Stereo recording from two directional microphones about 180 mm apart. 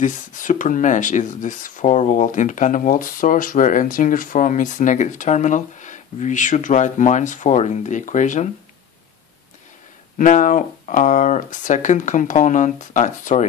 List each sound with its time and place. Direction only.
0.0 s speech: 45° left (ahead or behind)
10.1 s speech: 45° left (ahead or behind)